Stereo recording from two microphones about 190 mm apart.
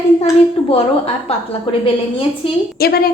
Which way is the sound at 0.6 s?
30° left (ahead or behind).